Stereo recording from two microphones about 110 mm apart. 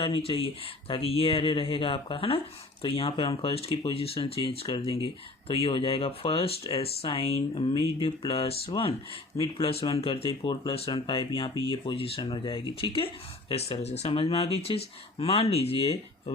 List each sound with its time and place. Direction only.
0.0 s speech: 55° left (ahead or behind)
10.7 s speech: 55° left (ahead or behind)
13.5 s speech: 65° left (ahead or behind)